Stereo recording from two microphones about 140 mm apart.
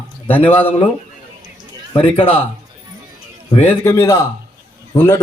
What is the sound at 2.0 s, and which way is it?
Speech, 40° left (ahead or behind).